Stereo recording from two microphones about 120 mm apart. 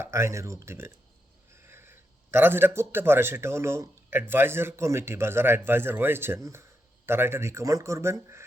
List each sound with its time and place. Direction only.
0.0 s a man's voice: 20° right (ahead or behind)